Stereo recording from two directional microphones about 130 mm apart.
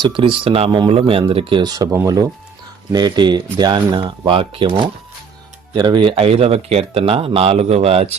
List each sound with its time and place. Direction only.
0.0 s speech: 40° right (ahead or behind)
1.6 s speech: 30° right (ahead or behind); by 8.1 s 50° right (ahead or behind)